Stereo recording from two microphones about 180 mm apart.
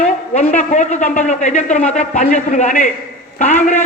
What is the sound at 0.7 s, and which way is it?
A man's voice, 40° left (ahead or behind).